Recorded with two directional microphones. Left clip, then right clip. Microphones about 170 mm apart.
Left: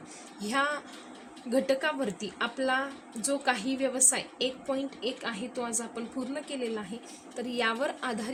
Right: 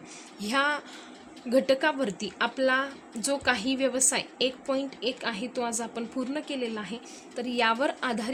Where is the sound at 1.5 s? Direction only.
65° right (ahead or behind).